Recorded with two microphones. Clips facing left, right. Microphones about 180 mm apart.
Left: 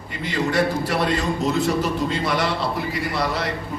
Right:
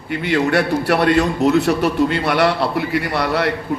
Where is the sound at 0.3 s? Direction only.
65° right (ahead or behind).